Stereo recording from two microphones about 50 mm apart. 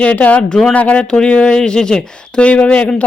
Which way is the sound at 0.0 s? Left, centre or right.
Left.